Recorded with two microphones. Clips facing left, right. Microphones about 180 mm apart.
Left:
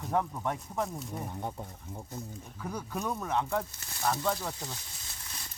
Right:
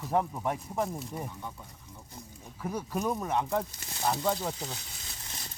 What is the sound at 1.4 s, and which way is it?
Speech, 50° left (ahead or behind).